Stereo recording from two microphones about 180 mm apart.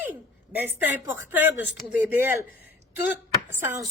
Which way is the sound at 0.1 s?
10° right (ahead or behind).